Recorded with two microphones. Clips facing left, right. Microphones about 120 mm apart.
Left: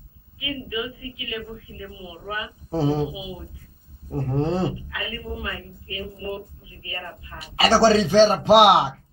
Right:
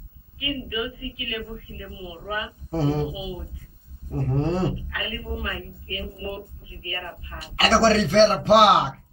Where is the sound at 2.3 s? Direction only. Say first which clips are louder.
Left 1 dB; 15° left (ahead or behind).